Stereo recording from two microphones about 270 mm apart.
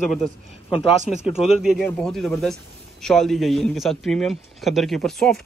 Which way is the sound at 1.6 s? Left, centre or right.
Centre.